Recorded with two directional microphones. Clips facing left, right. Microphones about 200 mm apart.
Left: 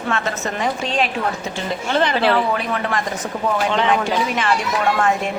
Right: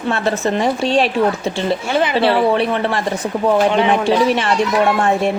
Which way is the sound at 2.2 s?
30° right (ahead or behind).